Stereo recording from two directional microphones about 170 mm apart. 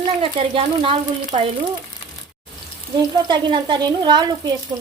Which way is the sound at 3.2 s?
25° right (ahead or behind).